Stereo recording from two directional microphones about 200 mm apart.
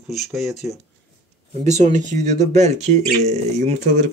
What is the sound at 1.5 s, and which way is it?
A man's voice, 35° right (ahead or behind).